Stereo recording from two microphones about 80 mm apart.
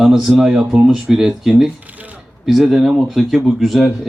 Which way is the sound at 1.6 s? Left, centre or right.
Centre.